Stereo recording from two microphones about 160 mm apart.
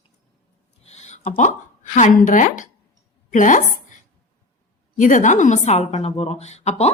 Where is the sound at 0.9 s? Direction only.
45° left (ahead or behind).